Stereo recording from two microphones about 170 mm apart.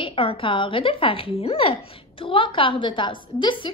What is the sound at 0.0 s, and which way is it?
A woman's voice, 30° left (ahead or behind).